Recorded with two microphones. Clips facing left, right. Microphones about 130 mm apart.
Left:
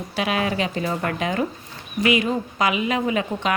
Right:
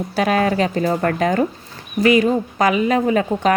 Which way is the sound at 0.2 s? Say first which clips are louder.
Right 6 dB; 40° right (ahead or behind).